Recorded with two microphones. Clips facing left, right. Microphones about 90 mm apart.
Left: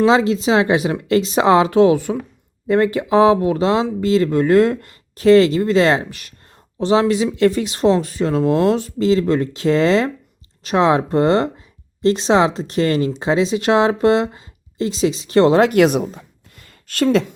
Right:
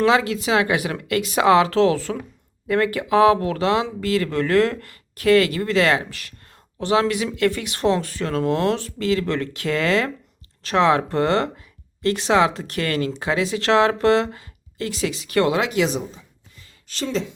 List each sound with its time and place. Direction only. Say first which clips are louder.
0.0 s speech: left 4 dB; 25° left (ahead or behind)
15.7 s speech: left 8 dB; 60° left (ahead or behind)